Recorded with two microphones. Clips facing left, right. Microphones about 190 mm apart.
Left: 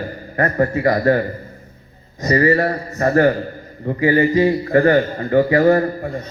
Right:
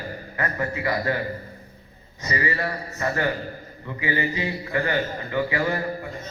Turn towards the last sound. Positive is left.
turn(degrees=50)  # may be behind; listen again after turning